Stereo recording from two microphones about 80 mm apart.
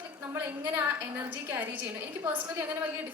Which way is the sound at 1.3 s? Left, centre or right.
Right.